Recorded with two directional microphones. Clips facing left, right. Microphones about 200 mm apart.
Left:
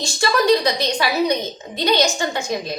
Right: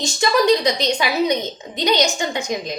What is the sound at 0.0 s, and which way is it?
A woman's voice, 20° right (ahead or behind).